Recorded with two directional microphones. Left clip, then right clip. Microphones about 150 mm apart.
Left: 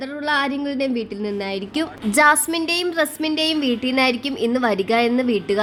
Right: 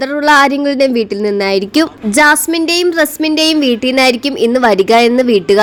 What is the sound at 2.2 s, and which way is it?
A woman's voice, 25° right (ahead or behind).